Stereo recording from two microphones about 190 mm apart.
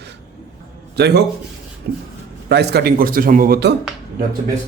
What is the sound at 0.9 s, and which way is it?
Speech, 60° right (ahead or behind).